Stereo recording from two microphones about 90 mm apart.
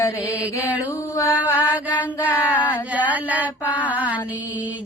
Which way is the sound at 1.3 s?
15° right (ahead or behind).